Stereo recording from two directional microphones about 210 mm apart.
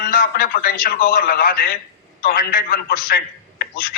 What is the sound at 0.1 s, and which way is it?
A man's voice, 45° left (ahead or behind).